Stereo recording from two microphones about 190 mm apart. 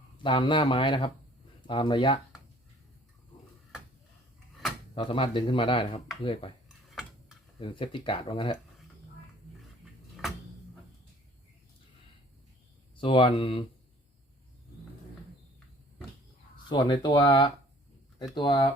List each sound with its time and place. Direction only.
0.2 s speech: 25° left (ahead or behind)
4.9 s speech: 25° left (ahead or behind)
6.7 s tick-tock: centre (ahead or behind)
7.6 s speech: 25° left (ahead or behind)
13.0 s speech: 25° left (ahead or behind)
16.6 s speech: 25° left (ahead or behind)